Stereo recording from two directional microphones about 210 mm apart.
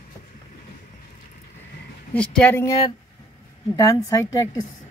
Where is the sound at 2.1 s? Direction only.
5° left (ahead or behind).